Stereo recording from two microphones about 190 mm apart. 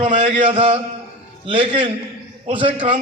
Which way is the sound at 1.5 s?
30° right (ahead or behind).